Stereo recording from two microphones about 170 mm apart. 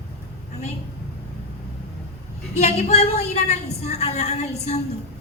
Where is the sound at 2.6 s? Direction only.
40° left (ahead or behind).